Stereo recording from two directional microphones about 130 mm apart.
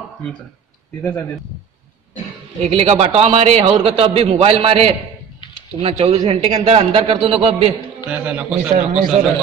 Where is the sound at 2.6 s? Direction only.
50° right (ahead or behind).